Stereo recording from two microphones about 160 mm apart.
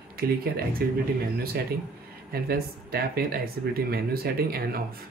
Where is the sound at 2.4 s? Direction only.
70° right (ahead or behind).